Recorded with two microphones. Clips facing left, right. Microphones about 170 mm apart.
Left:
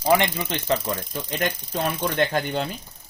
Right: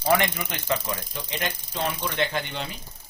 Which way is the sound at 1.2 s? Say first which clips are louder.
Left 5 dB; 45° left (ahead or behind).